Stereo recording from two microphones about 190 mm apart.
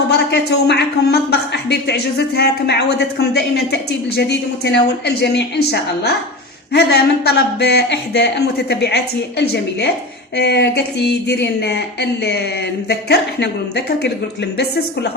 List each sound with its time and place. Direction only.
0.1 s speech: 60° left (ahead or behind)
10.3 s speech: 60° left (ahead or behind)